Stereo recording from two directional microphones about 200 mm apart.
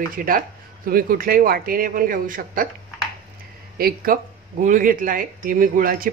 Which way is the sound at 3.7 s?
45° right (ahead or behind).